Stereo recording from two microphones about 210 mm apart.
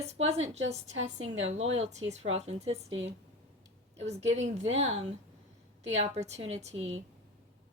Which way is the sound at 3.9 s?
30° right (ahead or behind).